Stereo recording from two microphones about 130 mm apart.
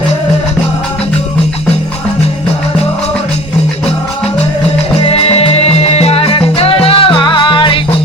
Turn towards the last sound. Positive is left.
turn(degrees=40)  # may be behind; listen again after turning